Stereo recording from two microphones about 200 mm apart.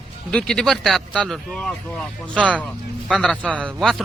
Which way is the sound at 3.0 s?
Centre (ahead or behind).